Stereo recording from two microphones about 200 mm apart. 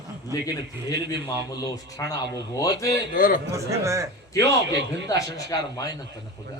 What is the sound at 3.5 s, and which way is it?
Speech, 15° right (ahead or behind).